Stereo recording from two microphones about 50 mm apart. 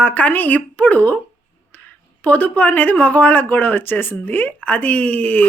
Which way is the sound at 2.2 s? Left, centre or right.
Left.